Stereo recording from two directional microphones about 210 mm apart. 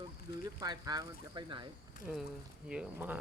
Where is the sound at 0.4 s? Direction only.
20° right (ahead or behind).